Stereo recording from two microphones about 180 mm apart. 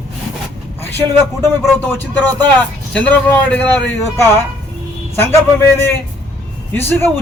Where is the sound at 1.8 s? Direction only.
10° left (ahead or behind).